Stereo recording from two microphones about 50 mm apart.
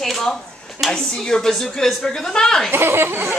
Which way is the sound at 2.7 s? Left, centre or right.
Right.